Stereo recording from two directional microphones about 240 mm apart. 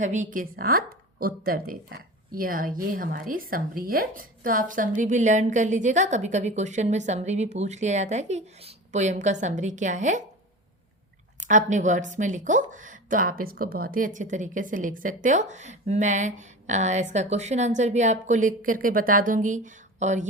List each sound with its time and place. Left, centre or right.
0.0 s a woman's voice: right
11.3 s speech: right